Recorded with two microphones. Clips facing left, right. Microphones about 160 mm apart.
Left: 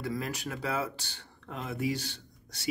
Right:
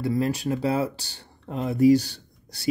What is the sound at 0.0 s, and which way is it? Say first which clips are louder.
Speech: right 10 dB; 30° right (ahead or behind).